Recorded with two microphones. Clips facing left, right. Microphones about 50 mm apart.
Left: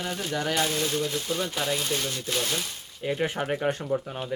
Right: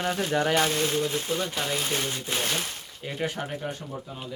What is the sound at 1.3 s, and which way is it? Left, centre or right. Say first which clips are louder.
Speech: even; centre.